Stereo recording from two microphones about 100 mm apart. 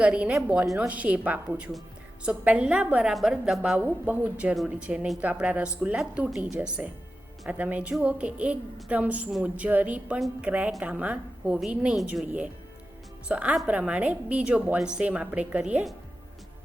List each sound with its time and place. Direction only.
0.0 s a woman's voice: 10° right (ahead or behind)
3.8 s a woman's voice: 15° right (ahead or behind)